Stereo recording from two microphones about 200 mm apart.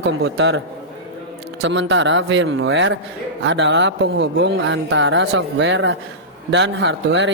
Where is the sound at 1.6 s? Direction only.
65° right (ahead or behind).